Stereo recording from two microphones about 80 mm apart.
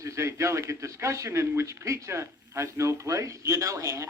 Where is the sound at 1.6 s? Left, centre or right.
Right.